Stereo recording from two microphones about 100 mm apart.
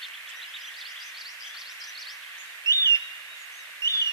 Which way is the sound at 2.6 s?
30° left (ahead or behind).